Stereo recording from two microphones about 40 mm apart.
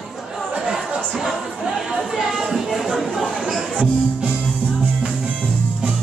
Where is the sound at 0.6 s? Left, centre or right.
Centre.